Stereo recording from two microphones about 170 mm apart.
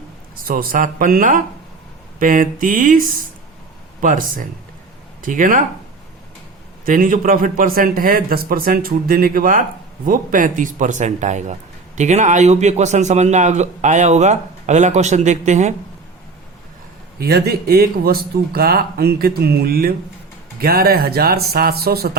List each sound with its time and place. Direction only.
0.4 s a man's voice: 55° right (ahead or behind)
6.8 s a man's voice: 55° right (ahead or behind)
17.2 s a man's voice: 70° right (ahead or behind)